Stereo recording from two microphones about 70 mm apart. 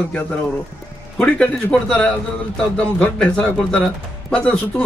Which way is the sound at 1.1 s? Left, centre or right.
Centre.